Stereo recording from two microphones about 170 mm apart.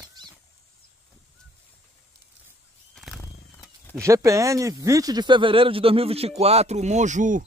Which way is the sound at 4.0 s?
20° right (ahead or behind).